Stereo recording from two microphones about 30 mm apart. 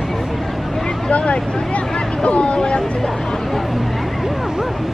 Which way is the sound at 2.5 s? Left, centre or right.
Left.